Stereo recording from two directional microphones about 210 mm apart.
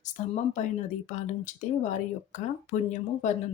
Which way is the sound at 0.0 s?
35° left (ahead or behind).